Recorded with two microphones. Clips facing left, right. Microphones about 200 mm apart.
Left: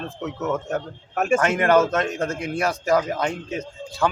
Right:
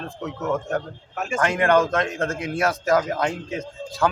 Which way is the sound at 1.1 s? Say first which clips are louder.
Left 8 dB; 55° left (ahead or behind).